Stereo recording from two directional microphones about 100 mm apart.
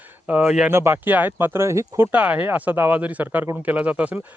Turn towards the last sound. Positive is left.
turn(degrees=-15)  # may be behind; listen again after turning